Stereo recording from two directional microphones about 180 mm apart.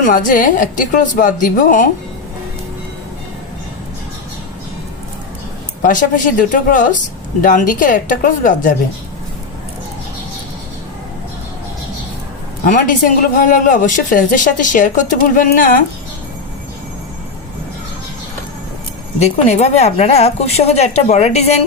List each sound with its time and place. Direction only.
0.0 s speech: 45° left (ahead or behind)
5.8 s speech: 45° left (ahead or behind)
12.6 s speech: 45° left (ahead or behind)
19.2 s a woman's voice: 40° left (ahead or behind)